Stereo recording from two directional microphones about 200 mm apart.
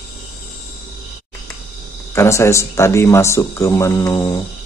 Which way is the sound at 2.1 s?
15° left (ahead or behind).